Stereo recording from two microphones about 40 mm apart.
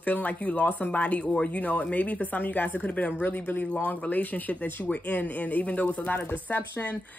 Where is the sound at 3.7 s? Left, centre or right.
Left.